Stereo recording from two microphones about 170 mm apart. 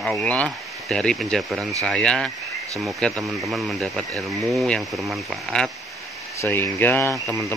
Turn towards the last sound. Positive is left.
turn(degrees=15)  # may be behind; listen again after turning